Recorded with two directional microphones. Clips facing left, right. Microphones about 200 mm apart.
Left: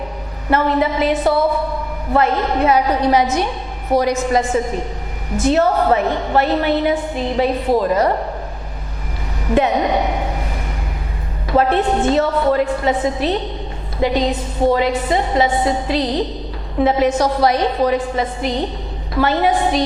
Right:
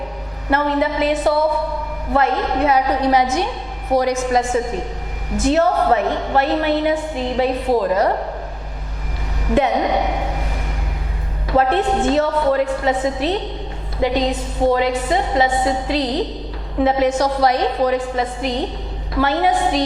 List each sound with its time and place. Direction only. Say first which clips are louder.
0.5 s a woman's voice: left 2 dB; 10° left (ahead or behind)
9.5 s a sound: left 1 dB; 10° left (ahead or behind)
11.4 s a woman's voice: left 1 dB; 15° left (ahead or behind)